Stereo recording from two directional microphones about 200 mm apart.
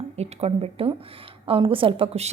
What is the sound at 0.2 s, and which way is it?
A woman's voice, 30° right (ahead or behind).